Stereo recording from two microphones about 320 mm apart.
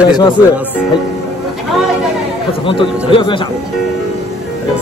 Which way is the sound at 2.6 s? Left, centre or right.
Centre.